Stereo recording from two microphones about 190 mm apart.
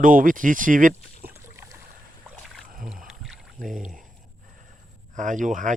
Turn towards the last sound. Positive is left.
turn(degrees=-40)  # may be behind; listen again after turning